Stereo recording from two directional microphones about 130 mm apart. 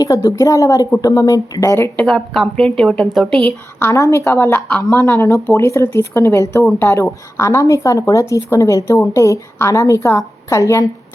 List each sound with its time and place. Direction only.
0.0 s speech: 25° left (ahead or behind)
2.0 s a woman's voice: 5° left (ahead or behind)
3.8 s speech: 20° left (ahead or behind)